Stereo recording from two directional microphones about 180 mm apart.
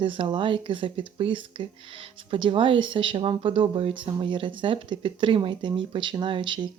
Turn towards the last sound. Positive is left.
turn(degrees=-25)  # may be behind; listen again after turning